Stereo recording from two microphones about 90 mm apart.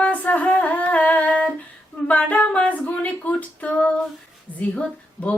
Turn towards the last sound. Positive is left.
turn(degrees=15)  # may be behind; listen again after turning